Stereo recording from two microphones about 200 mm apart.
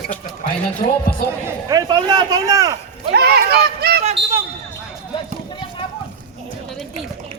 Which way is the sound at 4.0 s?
30° right (ahead or behind).